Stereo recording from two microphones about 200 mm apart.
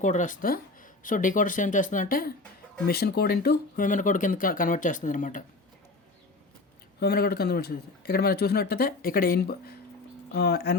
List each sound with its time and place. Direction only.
0.0 s speech: 35° left (ahead or behind)
7.0 s speech: 50° left (ahead or behind)